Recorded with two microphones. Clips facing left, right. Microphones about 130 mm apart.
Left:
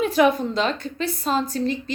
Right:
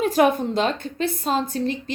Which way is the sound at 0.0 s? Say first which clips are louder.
Even; 45° right (ahead or behind).